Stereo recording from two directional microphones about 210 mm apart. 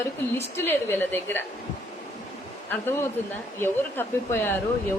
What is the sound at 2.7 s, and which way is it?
A woman's voice, 10° left (ahead or behind).